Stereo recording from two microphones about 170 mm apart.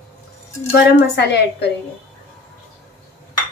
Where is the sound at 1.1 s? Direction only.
80° left.